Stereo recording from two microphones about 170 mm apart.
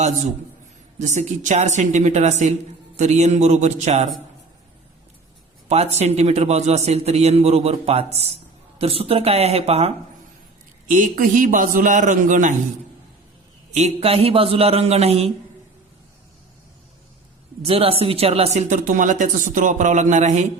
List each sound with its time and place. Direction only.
0.9 s speech: 45° right (ahead or behind)
5.6 s a man's voice: 40° right (ahead or behind)
10.8 s speech: 50° right (ahead or behind)
13.7 s a man's voice: 40° right (ahead or behind)
17.6 s a man's voice: 35° right (ahead or behind)